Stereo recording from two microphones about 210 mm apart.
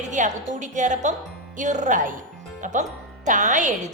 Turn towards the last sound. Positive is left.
turn(degrees=-35)  # may be behind; listen again after turning